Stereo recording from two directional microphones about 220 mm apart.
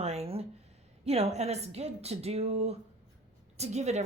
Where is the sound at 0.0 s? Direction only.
30° right (ahead or behind).